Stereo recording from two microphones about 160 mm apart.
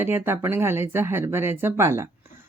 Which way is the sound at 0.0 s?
15° right (ahead or behind).